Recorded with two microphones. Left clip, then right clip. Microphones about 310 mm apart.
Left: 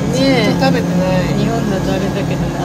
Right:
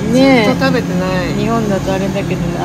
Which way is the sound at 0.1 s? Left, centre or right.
Centre.